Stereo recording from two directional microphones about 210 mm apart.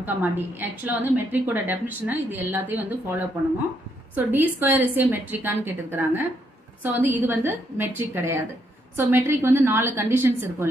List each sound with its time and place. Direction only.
0.0 s a woman's voice: 10° right (ahead or behind)